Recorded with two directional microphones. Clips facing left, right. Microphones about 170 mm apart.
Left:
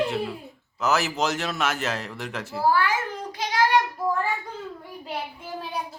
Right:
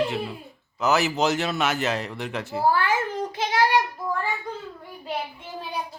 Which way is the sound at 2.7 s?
25° right (ahead or behind).